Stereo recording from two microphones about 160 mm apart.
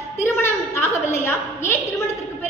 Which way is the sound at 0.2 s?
15° left (ahead or behind).